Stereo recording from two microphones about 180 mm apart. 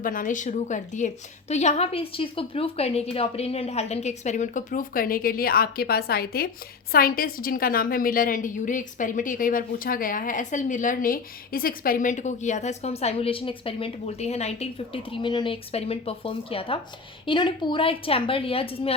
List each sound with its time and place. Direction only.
0.0 s a woman's voice: 50° left (ahead or behind); by 18.9 s 30° left (ahead or behind)